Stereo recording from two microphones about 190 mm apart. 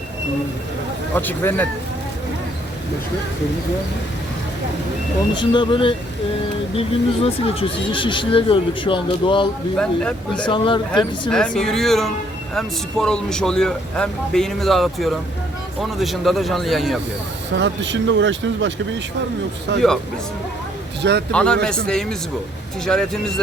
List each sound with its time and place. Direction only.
1.1 s speech: 10° left (ahead or behind)
5.3 s speech: 25° left (ahead or behind)
9.7 s speech: 5° left (ahead or behind)
10.4 s speech: 25° left (ahead or behind)
10.9 s speech: 5° left (ahead or behind)
17.5 s speech: 70° right (ahead or behind)
21.0 s speech: 60° right (ahead or behind)
21.3 s speech: 5° left (ahead or behind)
22.9 s speech: 5° left (ahead or behind)